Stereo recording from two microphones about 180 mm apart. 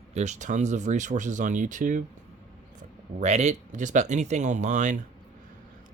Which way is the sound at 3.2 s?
40° right (ahead or behind).